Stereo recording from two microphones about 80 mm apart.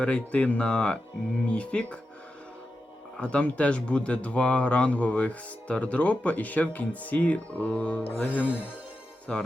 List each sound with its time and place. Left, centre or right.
0.0 s speech: centre
3.2 s speech: centre